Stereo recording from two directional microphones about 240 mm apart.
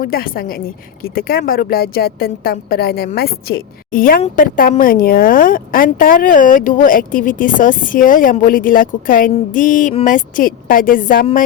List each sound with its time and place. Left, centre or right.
0.0 s speech: left